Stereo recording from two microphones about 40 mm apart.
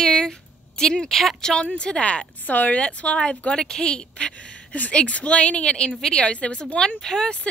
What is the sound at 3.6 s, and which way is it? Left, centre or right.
A woman's voice, centre.